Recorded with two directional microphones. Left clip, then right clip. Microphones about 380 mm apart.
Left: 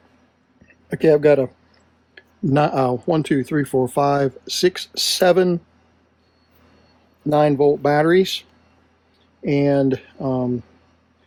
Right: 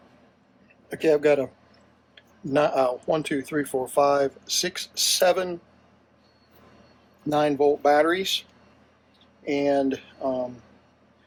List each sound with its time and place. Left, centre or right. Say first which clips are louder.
0.9 s speech: left 6 dB; left
2.1 s tick-tock: left 4 dB; left
3.1 s speech: left 5 dB; left
7.3 s speech: left 5 dB; left
9.5 s speech: left 5 dB; left